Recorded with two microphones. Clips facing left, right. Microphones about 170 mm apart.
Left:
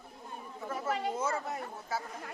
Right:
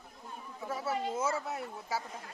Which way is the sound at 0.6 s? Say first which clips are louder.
Left 1 dB; 10° right (ahead or behind).